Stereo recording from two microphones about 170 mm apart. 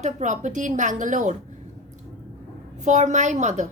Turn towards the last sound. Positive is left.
turn(degrees=-45)  # may be behind; listen again after turning